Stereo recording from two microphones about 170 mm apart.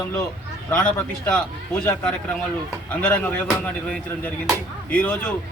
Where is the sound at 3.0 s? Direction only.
10° left (ahead or behind).